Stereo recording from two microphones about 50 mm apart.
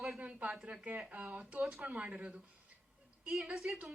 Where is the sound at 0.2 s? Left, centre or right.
Right.